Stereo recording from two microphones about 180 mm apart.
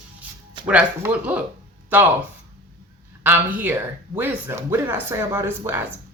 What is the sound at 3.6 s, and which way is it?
Speech, 10° right (ahead or behind).